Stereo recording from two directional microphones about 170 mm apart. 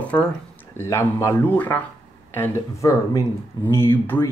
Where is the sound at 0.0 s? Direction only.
5° left (ahead or behind).